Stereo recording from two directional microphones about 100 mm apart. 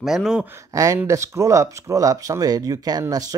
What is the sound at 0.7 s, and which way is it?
Speech, 30° right (ahead or behind).